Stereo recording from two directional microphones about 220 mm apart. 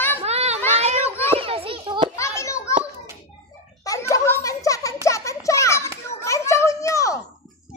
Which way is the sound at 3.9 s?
15° left (ahead or behind).